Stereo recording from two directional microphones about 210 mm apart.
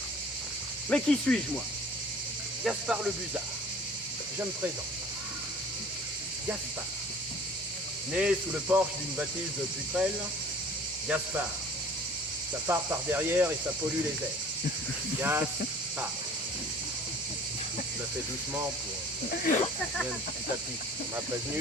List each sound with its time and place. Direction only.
0.9 s speech: 5° left (ahead or behind)
2.6 s speech: 5° right (ahead or behind)
8.1 s speech: 5° right (ahead or behind)
12.6 s speech: 10° right (ahead or behind)
15.2 s speech: 10° right (ahead or behind)
19.3 s speech: 40° left (ahead or behind)